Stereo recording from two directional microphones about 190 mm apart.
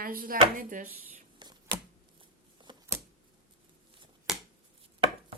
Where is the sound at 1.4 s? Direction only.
25° right (ahead or behind).